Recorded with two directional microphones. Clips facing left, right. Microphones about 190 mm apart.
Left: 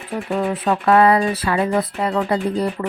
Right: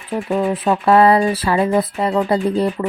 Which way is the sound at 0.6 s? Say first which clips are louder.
Right 1 dB; 25° right (ahead or behind).